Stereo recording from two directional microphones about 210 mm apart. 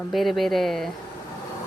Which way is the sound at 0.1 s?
Centre (ahead or behind).